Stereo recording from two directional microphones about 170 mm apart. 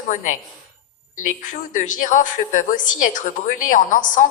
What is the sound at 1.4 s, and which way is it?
A woman's voice, 50° left (ahead or behind).